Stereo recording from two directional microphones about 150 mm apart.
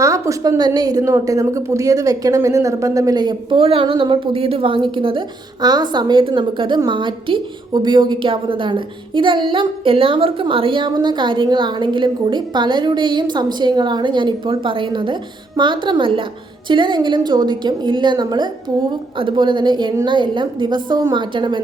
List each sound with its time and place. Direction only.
0.0 s a woman's voice: 20° right (ahead or behind)